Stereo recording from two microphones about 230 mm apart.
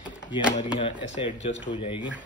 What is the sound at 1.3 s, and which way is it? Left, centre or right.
Speech, left.